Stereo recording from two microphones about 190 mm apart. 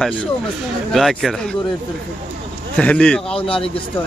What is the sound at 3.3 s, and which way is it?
Speech, 30° left (ahead or behind).